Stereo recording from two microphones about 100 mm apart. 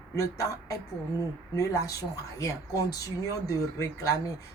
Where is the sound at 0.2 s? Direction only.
35° left (ahead or behind).